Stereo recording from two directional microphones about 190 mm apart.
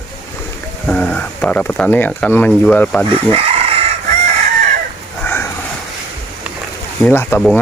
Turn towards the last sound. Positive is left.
turn(degrees=10)  # may be behind; listen again after turning